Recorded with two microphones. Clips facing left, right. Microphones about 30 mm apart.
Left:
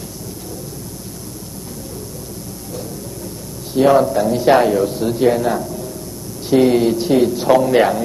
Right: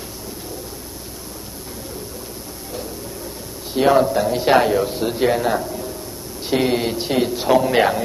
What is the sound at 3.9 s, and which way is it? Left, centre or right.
A man's voice, centre.